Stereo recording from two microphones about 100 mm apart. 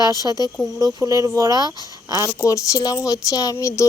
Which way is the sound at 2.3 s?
35° left (ahead or behind).